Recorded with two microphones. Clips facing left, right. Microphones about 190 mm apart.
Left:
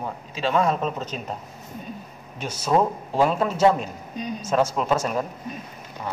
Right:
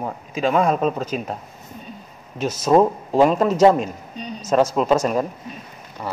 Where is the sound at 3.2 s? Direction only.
15° right (ahead or behind).